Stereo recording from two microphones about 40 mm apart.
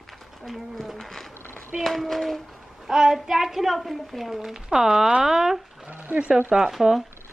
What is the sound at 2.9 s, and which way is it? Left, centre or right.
Child singing, centre.